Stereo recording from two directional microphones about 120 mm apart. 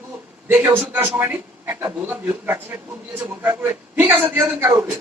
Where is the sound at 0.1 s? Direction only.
15° right (ahead or behind).